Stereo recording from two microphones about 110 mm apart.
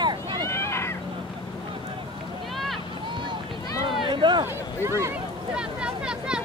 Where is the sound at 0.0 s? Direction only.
40° right (ahead or behind).